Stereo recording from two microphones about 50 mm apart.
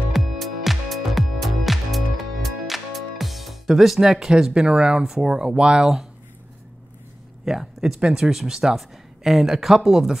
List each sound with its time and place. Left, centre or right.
0.1 s music: centre
7.4 s speech: centre